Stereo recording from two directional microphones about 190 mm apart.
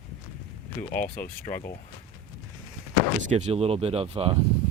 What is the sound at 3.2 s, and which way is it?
Speech, 40° right (ahead or behind).